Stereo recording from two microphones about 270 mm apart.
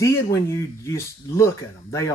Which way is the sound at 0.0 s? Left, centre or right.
Centre.